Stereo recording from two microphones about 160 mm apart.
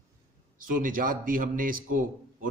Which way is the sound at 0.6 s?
60° right (ahead or behind).